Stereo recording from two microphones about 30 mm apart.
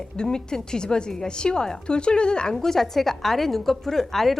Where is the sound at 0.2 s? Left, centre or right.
Left.